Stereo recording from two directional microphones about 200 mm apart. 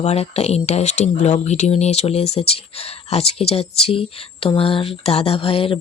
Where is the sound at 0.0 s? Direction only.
30° left (ahead or behind).